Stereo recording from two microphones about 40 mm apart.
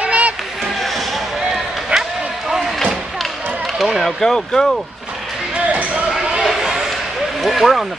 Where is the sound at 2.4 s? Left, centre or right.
Centre.